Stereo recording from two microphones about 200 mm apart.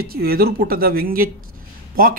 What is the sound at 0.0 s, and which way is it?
Speech, 50° right (ahead or behind).